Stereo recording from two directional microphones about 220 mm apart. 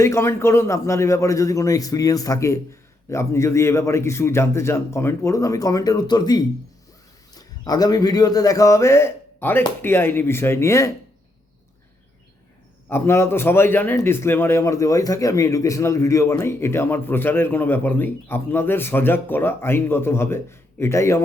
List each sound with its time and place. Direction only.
0.0 s a man's voice: 10° left (ahead or behind)
12.9 s a man's voice: 10° left (ahead or behind)